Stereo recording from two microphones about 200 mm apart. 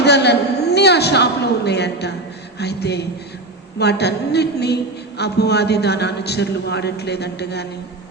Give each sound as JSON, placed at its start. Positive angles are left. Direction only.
{"t": 0.0, "sound": "a woman's voice", "side_deg": 55}